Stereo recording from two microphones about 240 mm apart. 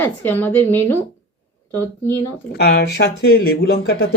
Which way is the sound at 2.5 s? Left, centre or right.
Left.